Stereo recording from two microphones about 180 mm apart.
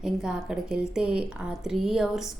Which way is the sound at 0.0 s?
5° right (ahead or behind).